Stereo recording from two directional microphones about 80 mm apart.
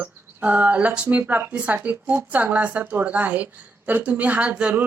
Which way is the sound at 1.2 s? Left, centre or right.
Right.